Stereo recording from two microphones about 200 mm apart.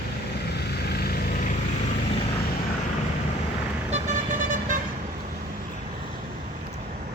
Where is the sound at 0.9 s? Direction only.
50° left (ahead or behind).